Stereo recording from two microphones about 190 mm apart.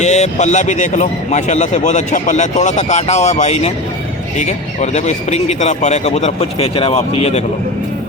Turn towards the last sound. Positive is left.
turn(degrees=35)  # may be behind; listen again after turning